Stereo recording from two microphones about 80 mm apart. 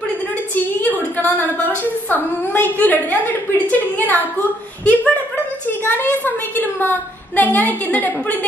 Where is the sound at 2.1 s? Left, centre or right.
Left.